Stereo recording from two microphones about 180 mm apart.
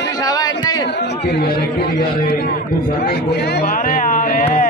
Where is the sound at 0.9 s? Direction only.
65° left (ahead or behind).